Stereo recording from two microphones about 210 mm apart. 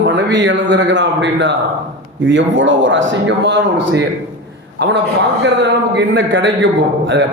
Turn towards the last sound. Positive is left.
turn(degrees=-60)  # may be behind; listen again after turning